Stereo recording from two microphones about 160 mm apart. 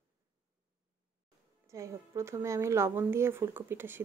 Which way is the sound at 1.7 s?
15° right (ahead or behind).